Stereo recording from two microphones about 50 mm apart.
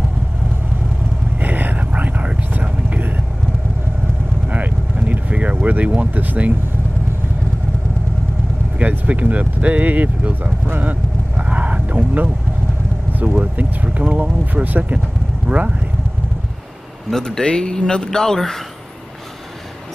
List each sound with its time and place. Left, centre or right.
1.4 s whispering: right
4.5 s vehicle: right
8.7 s a sound: right
13.9 s speech: right
17.1 s speech: centre